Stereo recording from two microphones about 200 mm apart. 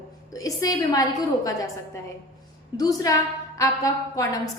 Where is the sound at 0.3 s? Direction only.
15° left (ahead or behind).